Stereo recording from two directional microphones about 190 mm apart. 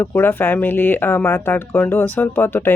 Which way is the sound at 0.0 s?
10° left (ahead or behind).